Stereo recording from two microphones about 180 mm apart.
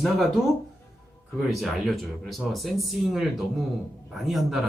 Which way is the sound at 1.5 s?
Centre (ahead or behind).